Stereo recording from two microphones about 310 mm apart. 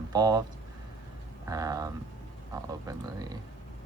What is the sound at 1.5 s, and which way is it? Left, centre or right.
Speech, centre.